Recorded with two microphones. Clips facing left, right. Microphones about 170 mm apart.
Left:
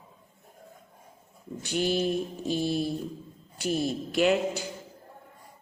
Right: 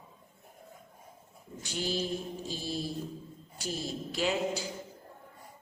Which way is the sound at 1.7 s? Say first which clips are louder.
Left 7 dB; 60° left (ahead or behind).